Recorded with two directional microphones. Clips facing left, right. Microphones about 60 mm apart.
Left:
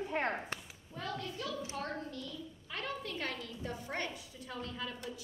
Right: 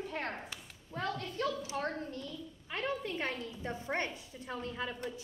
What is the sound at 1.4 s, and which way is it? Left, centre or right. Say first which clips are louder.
Speech: right 10 dB; right.